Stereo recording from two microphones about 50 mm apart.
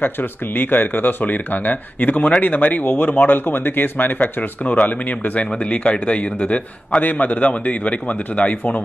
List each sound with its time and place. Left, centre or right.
0.0 s a man's voice: left